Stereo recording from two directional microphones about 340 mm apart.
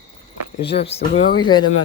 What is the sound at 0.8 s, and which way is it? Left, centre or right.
Speech, centre.